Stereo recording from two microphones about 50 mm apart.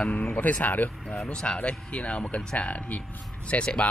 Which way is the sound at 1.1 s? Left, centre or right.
Centre.